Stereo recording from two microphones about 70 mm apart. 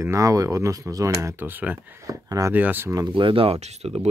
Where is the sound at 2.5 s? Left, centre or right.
Right.